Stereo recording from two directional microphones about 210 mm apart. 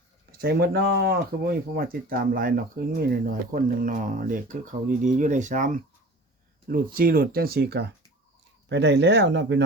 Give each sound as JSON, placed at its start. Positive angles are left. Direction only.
{"t": 0.3, "sound": "speech", "side_deg": -50}